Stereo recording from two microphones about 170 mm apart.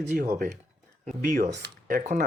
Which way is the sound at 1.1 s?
50° right (ahead or behind).